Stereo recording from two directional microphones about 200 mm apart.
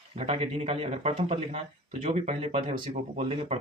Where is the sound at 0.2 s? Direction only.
30° right (ahead or behind).